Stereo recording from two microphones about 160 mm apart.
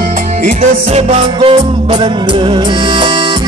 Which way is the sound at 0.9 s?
40° right (ahead or behind).